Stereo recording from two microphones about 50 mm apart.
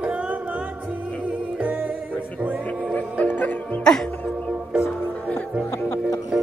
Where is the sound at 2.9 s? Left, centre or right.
Left.